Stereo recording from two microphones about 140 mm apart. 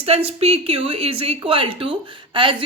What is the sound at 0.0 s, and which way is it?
Speech, 45° right (ahead or behind).